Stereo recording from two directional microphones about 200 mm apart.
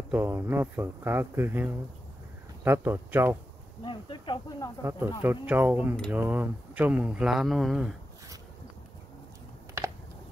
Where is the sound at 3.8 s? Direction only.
25° left (ahead or behind).